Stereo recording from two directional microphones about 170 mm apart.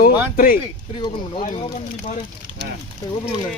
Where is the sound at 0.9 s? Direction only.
30° left (ahead or behind).